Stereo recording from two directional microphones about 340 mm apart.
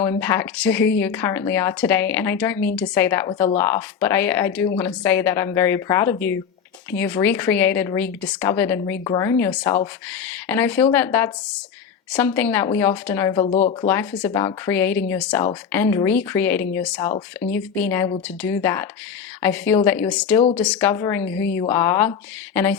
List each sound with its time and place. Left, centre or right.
0.0 s speech: centre
13.8 s speech: centre